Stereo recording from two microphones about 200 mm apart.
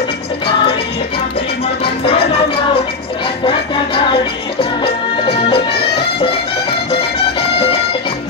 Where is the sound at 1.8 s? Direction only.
30° left (ahead or behind).